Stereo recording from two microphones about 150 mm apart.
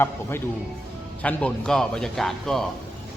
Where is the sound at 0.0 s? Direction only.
15° left (ahead or behind).